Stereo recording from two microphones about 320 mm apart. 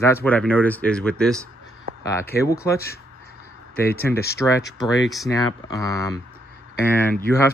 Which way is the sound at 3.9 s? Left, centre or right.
Centre.